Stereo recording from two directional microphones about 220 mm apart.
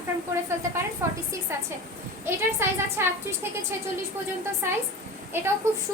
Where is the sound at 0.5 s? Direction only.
10° right (ahead or behind).